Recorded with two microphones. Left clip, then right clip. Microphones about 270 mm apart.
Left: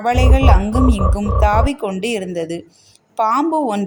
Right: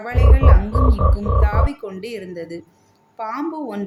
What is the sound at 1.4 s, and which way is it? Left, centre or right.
A woman's voice, left.